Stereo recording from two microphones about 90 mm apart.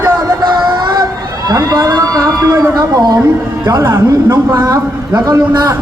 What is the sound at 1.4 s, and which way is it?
A man's voice, 45° right (ahead or behind).